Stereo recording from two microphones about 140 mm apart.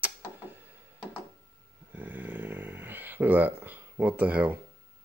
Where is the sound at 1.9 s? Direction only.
15° right (ahead or behind).